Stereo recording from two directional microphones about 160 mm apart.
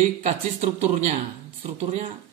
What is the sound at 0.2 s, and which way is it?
A man's voice, 45° right (ahead or behind).